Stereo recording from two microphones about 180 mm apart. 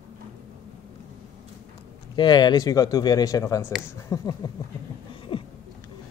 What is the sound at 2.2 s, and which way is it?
Speech, 25° left (ahead or behind).